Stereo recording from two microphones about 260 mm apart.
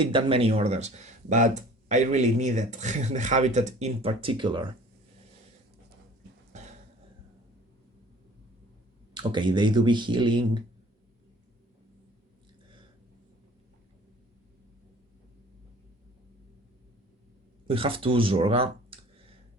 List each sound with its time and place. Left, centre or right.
0.0 s speech: centre
9.1 s speech: centre
17.7 s speech: right